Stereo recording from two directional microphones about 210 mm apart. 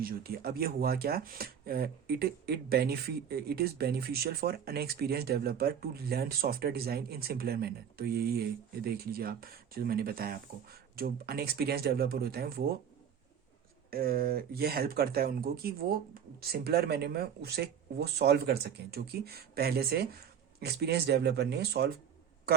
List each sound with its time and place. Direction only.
0.0 s speech: 45° right (ahead or behind)
13.9 s speech: 45° right (ahead or behind)